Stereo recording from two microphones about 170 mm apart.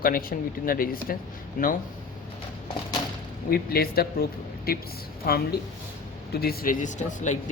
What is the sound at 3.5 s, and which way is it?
Speech, 65° left (ahead or behind).